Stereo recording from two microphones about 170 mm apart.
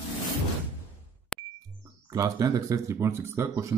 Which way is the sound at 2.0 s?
20° right (ahead or behind).